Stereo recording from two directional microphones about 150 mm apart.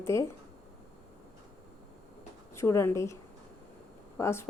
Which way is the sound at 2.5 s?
20° left (ahead or behind).